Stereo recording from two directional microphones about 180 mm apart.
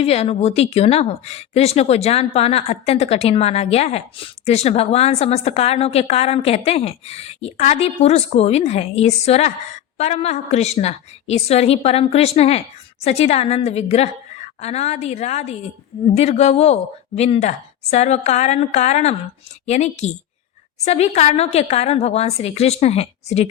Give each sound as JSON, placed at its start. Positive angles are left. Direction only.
{"t": 0.0, "sound": "a woman's voice", "side_deg": 35}